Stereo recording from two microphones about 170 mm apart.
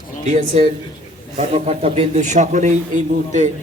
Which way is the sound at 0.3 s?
40° right (ahead or behind).